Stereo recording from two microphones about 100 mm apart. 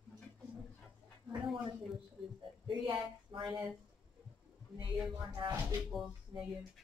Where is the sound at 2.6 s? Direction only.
55° right (ahead or behind).